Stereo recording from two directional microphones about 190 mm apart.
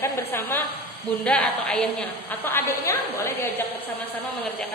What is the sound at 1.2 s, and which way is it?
A woman's voice, 5° left (ahead or behind).